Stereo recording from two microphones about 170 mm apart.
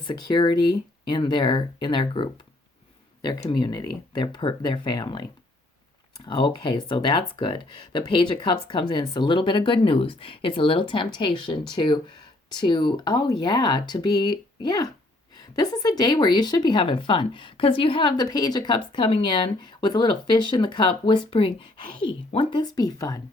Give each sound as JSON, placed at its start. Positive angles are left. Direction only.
{"t": 0.0, "sound": "speech", "side_deg": 25}